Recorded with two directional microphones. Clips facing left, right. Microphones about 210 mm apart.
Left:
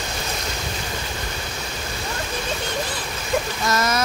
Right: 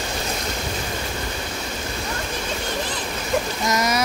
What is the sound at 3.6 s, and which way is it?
Speech, 15° right (ahead or behind).